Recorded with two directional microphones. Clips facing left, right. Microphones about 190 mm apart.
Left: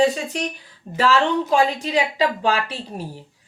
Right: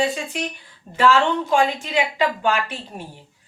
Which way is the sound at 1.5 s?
35° left (ahead or behind).